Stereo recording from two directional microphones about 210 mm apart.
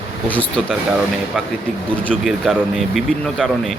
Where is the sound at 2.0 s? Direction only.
Centre (ahead or behind).